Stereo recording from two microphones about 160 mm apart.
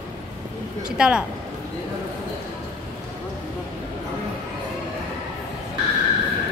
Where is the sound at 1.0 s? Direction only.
5° right (ahead or behind).